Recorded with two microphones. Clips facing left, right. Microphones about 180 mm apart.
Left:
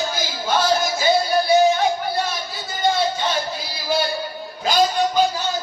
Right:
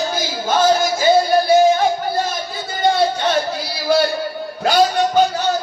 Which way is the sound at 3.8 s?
60° right (ahead or behind).